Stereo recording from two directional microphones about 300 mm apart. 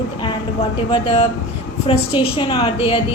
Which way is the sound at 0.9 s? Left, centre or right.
Centre.